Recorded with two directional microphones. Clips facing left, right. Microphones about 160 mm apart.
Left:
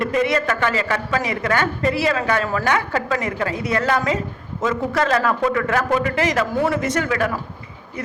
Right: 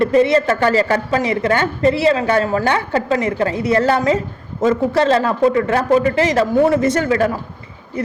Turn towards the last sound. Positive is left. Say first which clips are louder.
# right 5 dB
turn(degrees=-30)  # may be behind; listen again after turning